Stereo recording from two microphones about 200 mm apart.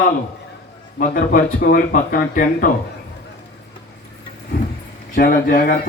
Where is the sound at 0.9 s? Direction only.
45° left (ahead or behind).